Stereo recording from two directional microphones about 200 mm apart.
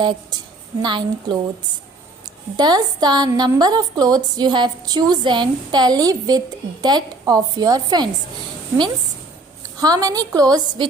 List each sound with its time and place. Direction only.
0.0 s a woman's voice: 20° right (ahead or behind)
2.6 s a woman's voice: 20° right (ahead or behind)
9.8 s a woman's voice: 20° right (ahead or behind)